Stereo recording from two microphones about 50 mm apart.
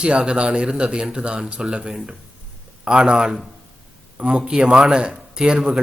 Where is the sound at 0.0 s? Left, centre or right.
Centre.